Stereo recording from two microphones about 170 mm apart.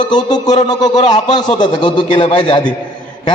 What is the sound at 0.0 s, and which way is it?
A man's voice, 25° left (ahead or behind).